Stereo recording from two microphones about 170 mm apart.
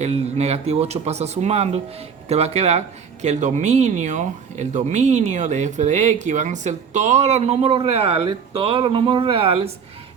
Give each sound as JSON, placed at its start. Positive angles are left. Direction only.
{"t": 0.0, "sound": "speech", "side_deg": -40}